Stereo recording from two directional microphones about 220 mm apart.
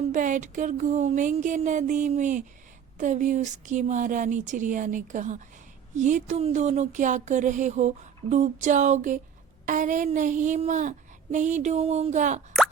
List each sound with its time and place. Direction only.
0.1 s speech: 35° right (ahead or behind)